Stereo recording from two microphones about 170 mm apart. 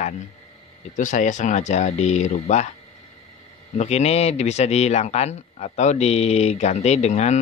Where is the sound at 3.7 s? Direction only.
40° left (ahead or behind).